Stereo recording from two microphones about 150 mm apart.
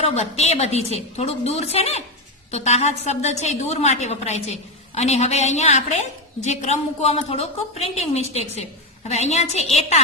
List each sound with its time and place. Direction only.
0.1 s a woman's voice: 45° left (ahead or behind)